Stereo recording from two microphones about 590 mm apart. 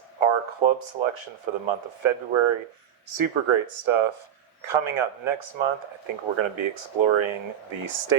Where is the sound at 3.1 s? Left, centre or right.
Right.